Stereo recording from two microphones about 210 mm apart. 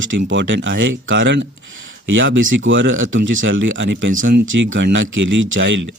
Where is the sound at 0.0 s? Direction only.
65° right (ahead or behind).